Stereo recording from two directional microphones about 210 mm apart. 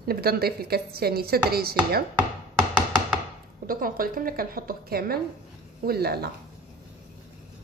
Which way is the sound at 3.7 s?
45° right (ahead or behind).